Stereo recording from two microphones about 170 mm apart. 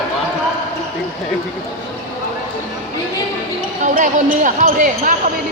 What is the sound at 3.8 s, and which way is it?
Speech, 45° right (ahead or behind).